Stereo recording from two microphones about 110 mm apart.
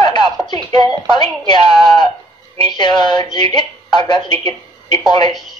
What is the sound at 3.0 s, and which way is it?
Speech, 45° left (ahead or behind).